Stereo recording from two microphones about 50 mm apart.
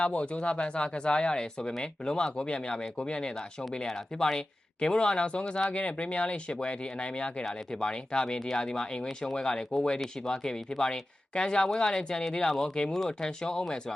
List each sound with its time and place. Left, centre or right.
0.0 s speech: left